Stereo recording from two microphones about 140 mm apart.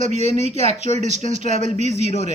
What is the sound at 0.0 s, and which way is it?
Speech, 60° right (ahead or behind).